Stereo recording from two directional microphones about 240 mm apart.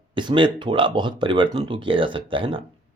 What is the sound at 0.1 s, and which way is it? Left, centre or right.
Speech, centre.